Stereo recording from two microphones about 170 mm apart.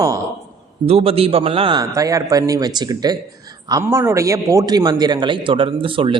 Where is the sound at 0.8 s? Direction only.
35° right (ahead or behind).